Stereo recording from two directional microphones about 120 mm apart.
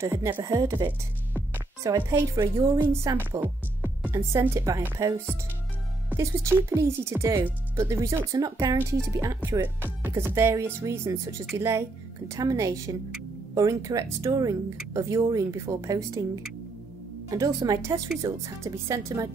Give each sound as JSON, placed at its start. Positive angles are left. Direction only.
{"t": 0.0, "sound": "speech", "side_deg": -20}
{"t": 17.3, "sound": "a woman's voice", "side_deg": -30}